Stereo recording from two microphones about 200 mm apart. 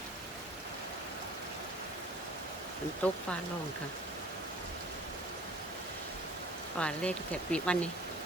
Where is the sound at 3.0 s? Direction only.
5° left (ahead or behind).